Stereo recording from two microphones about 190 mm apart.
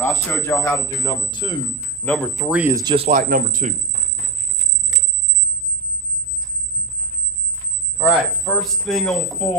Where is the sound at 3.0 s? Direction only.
45° right (ahead or behind).